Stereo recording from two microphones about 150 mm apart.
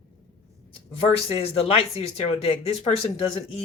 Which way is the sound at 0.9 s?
40° left (ahead or behind).